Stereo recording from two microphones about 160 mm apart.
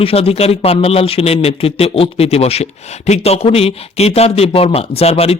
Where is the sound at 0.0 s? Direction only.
40° left (ahead or behind).